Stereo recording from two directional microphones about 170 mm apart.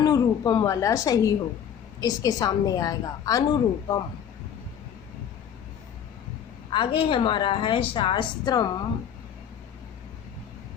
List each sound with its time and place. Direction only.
0.0 s a woman's voice: 25° left (ahead or behind)
6.7 s a woman's voice: 30° left (ahead or behind)